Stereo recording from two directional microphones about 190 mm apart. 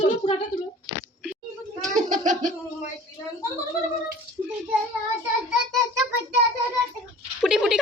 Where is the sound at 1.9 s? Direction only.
40° right (ahead or behind).